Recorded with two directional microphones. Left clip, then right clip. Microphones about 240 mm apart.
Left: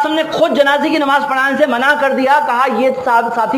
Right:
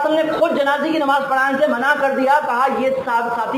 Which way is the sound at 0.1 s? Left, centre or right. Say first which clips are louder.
Left 3 dB; left.